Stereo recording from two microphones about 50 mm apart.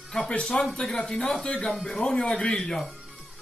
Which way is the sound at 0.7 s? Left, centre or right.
Centre.